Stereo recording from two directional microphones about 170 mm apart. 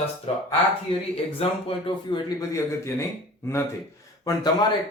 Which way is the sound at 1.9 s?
25° left (ahead or behind).